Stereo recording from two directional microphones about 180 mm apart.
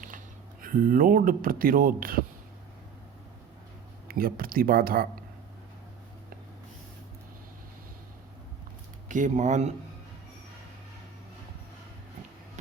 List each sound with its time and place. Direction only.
0.6 s speech: 50° right (ahead or behind)
4.1 s speech: 55° right (ahead or behind)
9.0 s speech: 45° right (ahead or behind)